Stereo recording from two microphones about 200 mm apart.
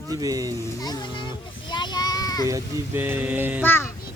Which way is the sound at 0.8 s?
20° left (ahead or behind).